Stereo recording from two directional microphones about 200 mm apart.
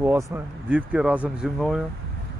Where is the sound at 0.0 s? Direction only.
10° right (ahead or behind).